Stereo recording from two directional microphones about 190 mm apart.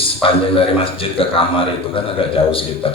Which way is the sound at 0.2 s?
30° left (ahead or behind).